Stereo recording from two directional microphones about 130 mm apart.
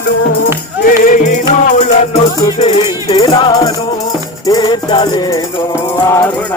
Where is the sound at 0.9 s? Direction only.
90° left.